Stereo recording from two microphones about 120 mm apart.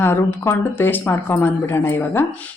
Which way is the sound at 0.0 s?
20° left (ahead or behind).